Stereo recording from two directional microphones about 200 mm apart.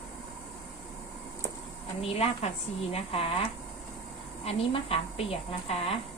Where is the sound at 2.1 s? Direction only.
30° left (ahead or behind).